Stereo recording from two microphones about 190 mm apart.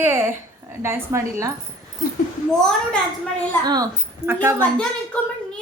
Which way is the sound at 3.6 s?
20° right (ahead or behind).